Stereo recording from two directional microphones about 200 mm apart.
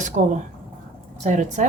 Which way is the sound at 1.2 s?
40° right (ahead or behind).